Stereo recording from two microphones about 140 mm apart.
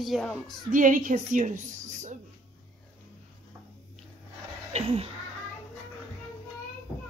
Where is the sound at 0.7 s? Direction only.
70° right (ahead or behind).